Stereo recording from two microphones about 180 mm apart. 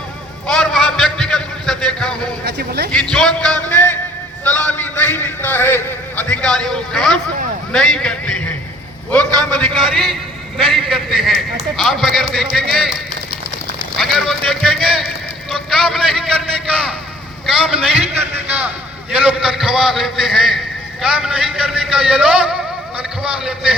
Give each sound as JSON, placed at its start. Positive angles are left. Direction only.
{"t": 0.4, "sound": "a sound", "side_deg": 0}
{"t": 2.4, "sound": "a man's voice", "side_deg": -65}
{"t": 2.9, "sound": "a man's voice", "side_deg": 5}
{"t": 14.0, "sound": "a man's voice", "side_deg": 0}
{"t": 17.7, "sound": "a man's voice", "side_deg": -10}